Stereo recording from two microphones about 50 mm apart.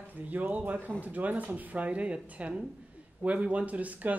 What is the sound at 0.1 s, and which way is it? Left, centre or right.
Speech, right.